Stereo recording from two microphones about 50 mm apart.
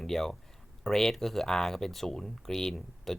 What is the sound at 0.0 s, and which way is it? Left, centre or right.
Speech, centre.